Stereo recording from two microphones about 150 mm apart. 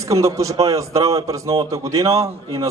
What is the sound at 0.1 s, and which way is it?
A man's voice, 20° right (ahead or behind).